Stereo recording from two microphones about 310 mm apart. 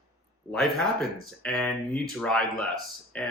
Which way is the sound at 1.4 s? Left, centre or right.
Centre.